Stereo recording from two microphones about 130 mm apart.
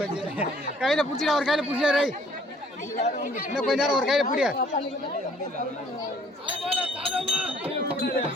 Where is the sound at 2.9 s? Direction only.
90° left.